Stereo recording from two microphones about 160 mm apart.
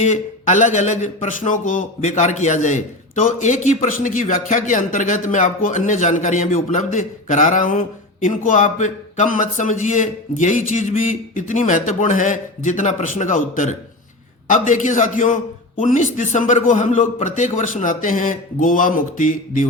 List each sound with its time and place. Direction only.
0.0 s speech: 45° left (ahead or behind)